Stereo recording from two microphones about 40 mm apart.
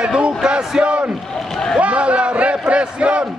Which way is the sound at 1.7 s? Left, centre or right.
Right.